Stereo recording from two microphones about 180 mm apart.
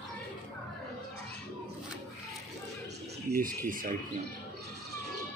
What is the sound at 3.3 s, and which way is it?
Speech, 50° right (ahead or behind).